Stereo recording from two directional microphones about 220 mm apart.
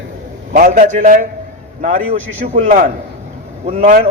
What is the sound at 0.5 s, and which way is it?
A man's voice, 40° right (ahead or behind).